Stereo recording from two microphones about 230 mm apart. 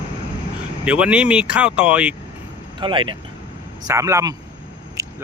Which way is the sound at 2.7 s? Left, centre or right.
Right.